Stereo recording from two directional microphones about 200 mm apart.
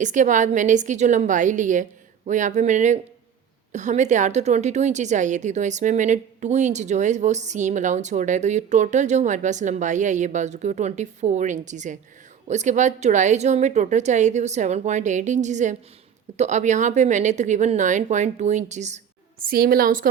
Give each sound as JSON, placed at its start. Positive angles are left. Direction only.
{"t": 0.0, "sound": "a woman's voice", "side_deg": -40}
{"t": 19.4, "sound": "a woman's voice", "side_deg": -50}